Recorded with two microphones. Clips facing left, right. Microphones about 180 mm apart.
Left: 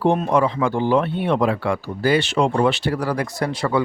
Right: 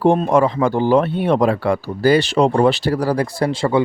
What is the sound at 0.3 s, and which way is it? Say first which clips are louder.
Speech: right 3 dB; 45° right (ahead or behind).